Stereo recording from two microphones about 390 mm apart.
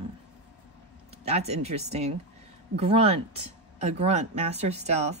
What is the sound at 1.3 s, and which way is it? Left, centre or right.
Speech, centre.